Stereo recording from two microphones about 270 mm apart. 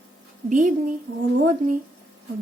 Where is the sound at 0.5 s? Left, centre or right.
Right.